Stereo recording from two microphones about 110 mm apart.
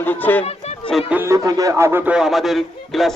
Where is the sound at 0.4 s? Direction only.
75° left (ahead or behind).